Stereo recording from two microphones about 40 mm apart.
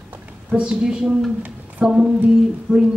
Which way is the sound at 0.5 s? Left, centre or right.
Right.